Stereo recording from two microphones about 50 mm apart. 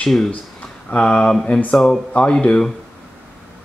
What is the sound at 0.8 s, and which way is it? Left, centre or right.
Speech, left.